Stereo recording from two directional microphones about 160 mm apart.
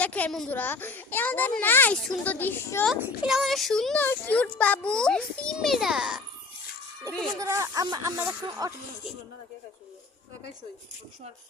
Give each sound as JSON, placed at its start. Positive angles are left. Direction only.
{"t": 0.0, "sound": "a child's voice", "side_deg": 10}
{"t": 2.8, "sound": "a child's voice", "side_deg": 0}
{"t": 7.3, "sound": "speech", "side_deg": -20}